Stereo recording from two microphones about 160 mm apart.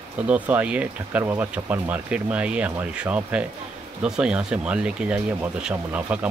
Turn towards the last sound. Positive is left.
turn(degrees=-10)  # may be behind; listen again after turning